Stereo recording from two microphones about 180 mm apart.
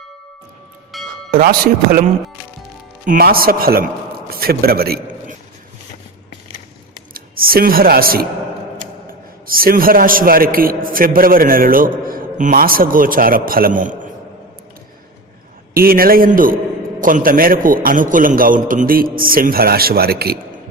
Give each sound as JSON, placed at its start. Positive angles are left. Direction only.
{"t": 0.9, "sound": "a sound", "side_deg": 0}
{"t": 1.3, "sound": "a man's voice", "side_deg": -55}
{"t": 3.1, "sound": "a man's voice", "side_deg": -55}
{"t": 7.1, "sound": "speech", "side_deg": -55}
{"t": 9.5, "sound": "a man's voice", "side_deg": -55}
{"t": 15.7, "sound": "a man's voice", "side_deg": -55}